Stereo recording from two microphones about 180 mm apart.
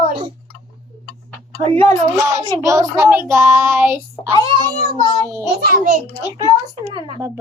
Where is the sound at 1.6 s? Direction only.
30° right (ahead or behind).